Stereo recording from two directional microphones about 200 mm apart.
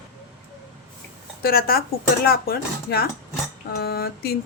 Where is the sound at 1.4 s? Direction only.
50° left (ahead or behind).